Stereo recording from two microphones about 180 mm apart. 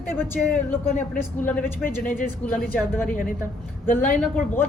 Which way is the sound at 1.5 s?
10° left (ahead or behind).